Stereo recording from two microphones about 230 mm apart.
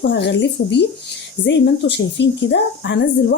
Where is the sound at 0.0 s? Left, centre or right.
Left.